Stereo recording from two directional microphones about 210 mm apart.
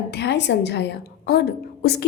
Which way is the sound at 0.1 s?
55° left (ahead or behind).